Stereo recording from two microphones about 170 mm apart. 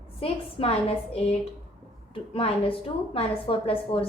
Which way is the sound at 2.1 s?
35° left (ahead or behind).